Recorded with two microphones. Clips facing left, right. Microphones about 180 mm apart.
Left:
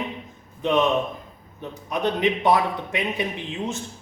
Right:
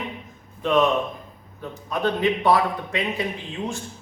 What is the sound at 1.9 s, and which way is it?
A man's voice, 20° left (ahead or behind).